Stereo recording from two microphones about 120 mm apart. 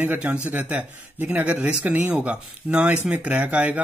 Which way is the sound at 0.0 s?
15° right (ahead or behind).